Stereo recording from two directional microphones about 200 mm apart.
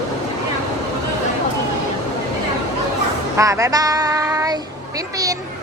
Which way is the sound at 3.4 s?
15° right (ahead or behind).